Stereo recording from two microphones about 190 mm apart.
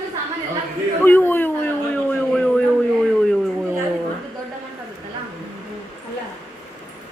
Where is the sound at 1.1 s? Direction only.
10° left (ahead or behind).